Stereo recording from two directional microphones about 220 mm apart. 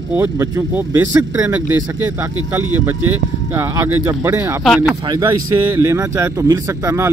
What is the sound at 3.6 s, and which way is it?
Speech, 10° right (ahead or behind).